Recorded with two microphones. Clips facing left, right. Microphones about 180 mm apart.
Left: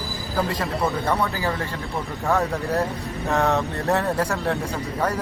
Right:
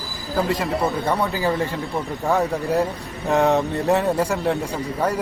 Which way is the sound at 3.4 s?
35° right (ahead or behind).